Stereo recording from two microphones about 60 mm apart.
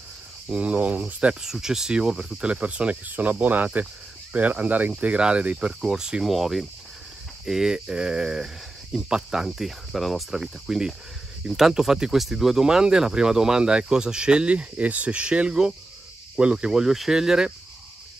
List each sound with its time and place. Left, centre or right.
0.5 s speech: right
1.4 s speech: centre
6.2 s speech: centre